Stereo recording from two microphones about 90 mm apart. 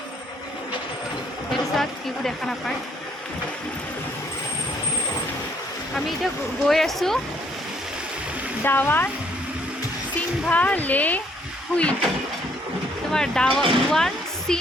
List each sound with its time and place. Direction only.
1.5 s speech: 5° left (ahead or behind)
6.7 s speech: 5° left (ahead or behind)
8.6 s speech: 25° left (ahead or behind)
10.5 s speech: 15° left (ahead or behind)
13.1 s speech: 5° left (ahead or behind)